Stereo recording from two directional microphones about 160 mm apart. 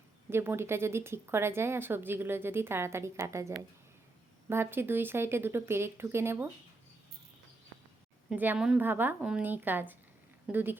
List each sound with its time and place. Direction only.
0.3 s speech: 15° right (ahead or behind)
8.3 s speech: 10° right (ahead or behind)